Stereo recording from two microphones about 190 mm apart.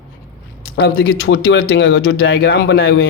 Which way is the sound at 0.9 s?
90° left.